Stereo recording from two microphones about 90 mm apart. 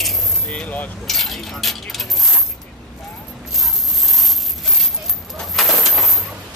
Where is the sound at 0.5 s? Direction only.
20° left (ahead or behind).